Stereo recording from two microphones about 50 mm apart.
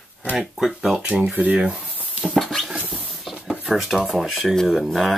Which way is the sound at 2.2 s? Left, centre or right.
Centre.